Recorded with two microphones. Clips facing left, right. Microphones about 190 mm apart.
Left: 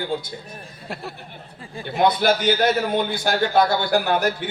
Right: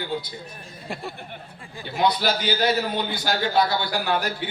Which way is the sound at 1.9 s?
50° left (ahead or behind).